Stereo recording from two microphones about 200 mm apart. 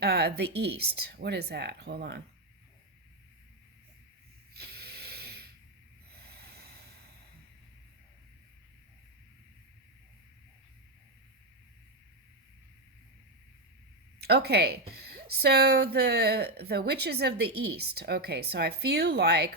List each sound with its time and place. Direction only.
0.0 s a woman's voice: 55° right (ahead or behind)
4.5 s a sound: 55° right (ahead or behind)
6.1 s snort: 50° right (ahead or behind)
14.2 s a woman's voice: 55° right (ahead or behind)